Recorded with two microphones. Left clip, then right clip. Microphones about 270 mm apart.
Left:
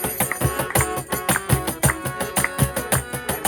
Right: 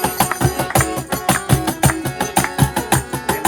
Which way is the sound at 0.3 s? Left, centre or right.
Centre.